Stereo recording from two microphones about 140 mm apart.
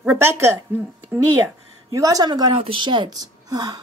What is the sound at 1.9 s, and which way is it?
Speech, 25° right (ahead or behind).